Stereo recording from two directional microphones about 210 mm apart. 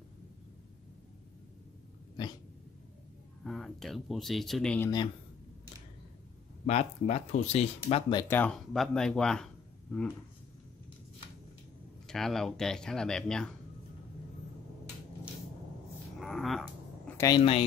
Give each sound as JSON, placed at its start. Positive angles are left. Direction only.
{"t": 3.4, "sound": "speech", "side_deg": 0}
{"t": 6.6, "sound": "speech", "side_deg": 30}
{"t": 8.2, "sound": "speech", "side_deg": 10}
{"t": 12.1, "sound": "speech", "side_deg": 0}
{"t": 16.2, "sound": "a sound", "side_deg": 0}
{"t": 17.2, "sound": "speech", "side_deg": 25}